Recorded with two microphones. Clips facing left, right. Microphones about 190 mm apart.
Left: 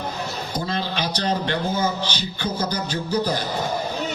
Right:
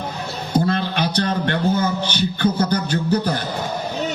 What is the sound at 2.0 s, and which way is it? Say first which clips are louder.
A man's voice: right 7 dB; 60° right (ahead or behind).